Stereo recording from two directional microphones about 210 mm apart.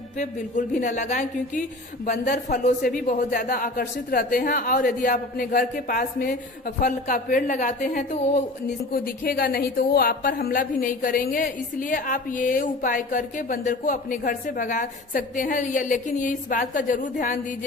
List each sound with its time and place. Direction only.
0.2 s speech: 35° left (ahead or behind)